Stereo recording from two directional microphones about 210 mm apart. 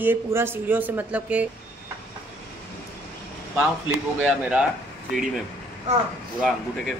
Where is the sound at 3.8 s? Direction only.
5° right (ahead or behind).